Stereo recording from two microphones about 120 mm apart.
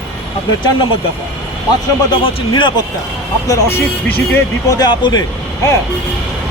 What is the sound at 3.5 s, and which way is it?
Speech, 20° left (ahead or behind).